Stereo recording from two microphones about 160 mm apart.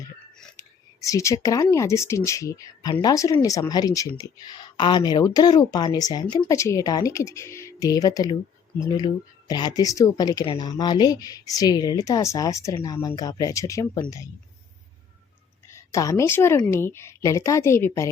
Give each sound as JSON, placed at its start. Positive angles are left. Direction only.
{"t": 1.0, "sound": "speech", "side_deg": 20}
{"t": 15.7, "sound": "a woman's voice", "side_deg": 20}